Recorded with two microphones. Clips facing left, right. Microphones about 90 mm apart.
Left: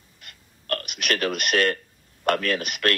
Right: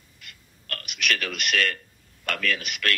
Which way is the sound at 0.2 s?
40° left (ahead or behind).